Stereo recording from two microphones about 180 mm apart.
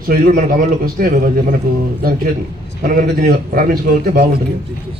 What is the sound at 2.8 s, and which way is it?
Speech, 50° right (ahead or behind).